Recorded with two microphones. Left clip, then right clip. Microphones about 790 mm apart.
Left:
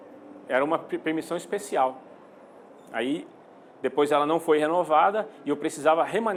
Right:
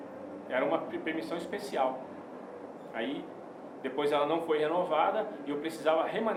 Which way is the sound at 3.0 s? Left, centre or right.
Left.